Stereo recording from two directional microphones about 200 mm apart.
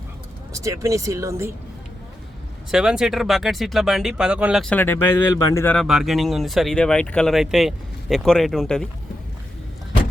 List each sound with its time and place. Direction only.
0.5 s speech: 15° right (ahead or behind)
2.7 s speech: 5° right (ahead or behind)